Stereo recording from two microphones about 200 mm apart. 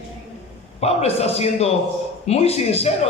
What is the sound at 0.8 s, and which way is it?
A man's voice, 30° left (ahead or behind).